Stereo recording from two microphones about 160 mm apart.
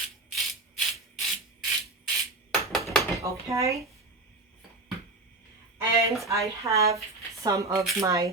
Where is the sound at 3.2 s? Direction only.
20° right (ahead or behind).